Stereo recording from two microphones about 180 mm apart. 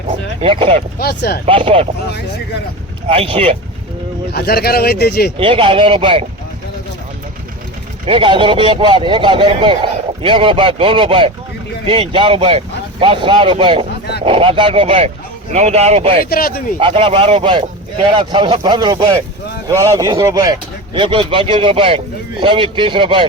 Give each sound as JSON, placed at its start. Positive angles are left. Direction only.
{"t": 0.4, "sound": "speech", "side_deg": -30}
{"t": 0.9, "sound": "speech", "side_deg": 60}
{"t": 1.5, "sound": "a man's voice", "side_deg": -30}
{"t": 3.1, "sound": "speech", "side_deg": -30}
{"t": 4.3, "sound": "speech", "side_deg": 60}
{"t": 5.4, "sound": "a man's voice", "side_deg": -30}
{"t": 8.0, "sound": "a man's voice", "side_deg": -30}
{"t": 16.3, "sound": "speech", "side_deg": 55}
{"t": 16.8, "sound": "a man's voice", "side_deg": -30}